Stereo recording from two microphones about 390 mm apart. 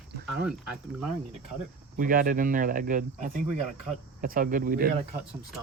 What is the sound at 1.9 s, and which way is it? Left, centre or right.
Speech, right.